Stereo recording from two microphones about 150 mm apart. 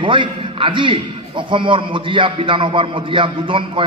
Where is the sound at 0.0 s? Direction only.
35° right (ahead or behind).